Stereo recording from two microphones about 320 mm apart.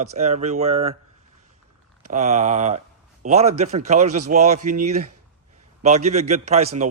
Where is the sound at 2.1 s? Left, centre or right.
Right.